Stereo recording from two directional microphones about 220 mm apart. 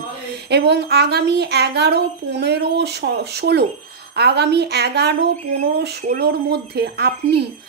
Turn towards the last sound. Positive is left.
turn(degrees=-50)  # may be behind; listen again after turning